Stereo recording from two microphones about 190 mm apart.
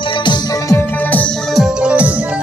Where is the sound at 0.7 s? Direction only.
10° left (ahead or behind).